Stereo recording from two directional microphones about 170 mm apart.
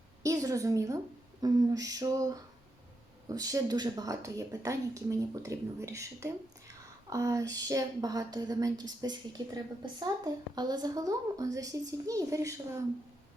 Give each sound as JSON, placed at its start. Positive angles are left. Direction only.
{"t": 0.2, "sound": "a woman's voice", "side_deg": -20}